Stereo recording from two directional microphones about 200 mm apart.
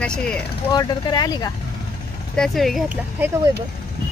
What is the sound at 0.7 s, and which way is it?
Speech, 20° left (ahead or behind).